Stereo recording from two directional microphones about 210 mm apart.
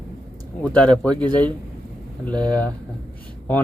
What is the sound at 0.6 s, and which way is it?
Speech, 5° left (ahead or behind).